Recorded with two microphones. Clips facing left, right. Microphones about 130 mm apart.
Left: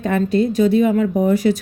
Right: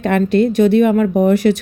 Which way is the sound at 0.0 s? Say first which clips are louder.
Right 3 dB; 80° right.